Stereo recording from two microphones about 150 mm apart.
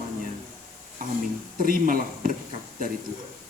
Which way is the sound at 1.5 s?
70° right (ahead or behind).